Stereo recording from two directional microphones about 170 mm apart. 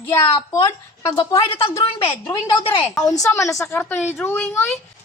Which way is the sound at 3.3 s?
20° left (ahead or behind).